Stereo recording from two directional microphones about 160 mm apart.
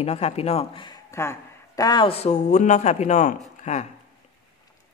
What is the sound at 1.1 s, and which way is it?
Speech, 15° left (ahead or behind).